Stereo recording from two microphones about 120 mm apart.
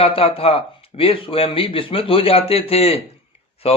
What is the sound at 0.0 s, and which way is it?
Speech, 50° left (ahead or behind).